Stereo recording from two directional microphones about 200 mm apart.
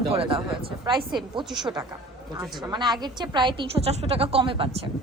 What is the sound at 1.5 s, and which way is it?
Speech, centre (ahead or behind).